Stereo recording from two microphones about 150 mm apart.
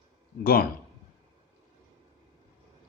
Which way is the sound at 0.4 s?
80° left.